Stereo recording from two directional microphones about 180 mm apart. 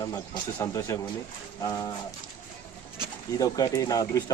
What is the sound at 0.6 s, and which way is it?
Speech, 15° left (ahead or behind).